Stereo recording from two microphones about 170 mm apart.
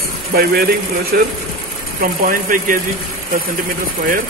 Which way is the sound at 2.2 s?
60° right (ahead or behind).